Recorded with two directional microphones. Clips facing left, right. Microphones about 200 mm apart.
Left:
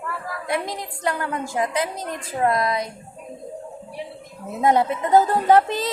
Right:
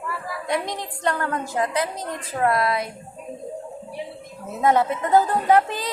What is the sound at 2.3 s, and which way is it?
Music, 20° left (ahead or behind).